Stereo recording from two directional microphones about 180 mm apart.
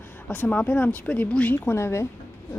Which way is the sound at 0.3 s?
10° left (ahead or behind).